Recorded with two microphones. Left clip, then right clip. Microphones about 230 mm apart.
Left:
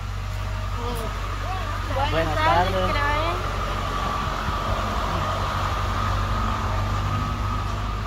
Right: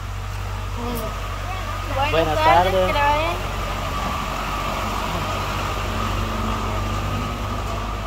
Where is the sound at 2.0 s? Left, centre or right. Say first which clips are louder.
Right 5 dB; right.